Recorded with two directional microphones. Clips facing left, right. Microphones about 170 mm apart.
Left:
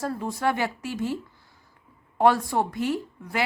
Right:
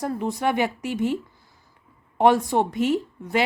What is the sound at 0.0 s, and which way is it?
A woman's voice, 20° right (ahead or behind).